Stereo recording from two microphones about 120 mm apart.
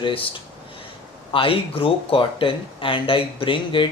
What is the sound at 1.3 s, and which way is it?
Speech, 50° left (ahead or behind).